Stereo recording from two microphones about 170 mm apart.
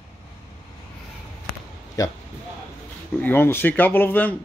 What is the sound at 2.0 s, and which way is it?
Speech, 20° left (ahead or behind).